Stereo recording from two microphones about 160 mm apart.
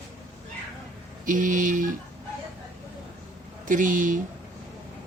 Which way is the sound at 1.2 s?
55° right (ahead or behind).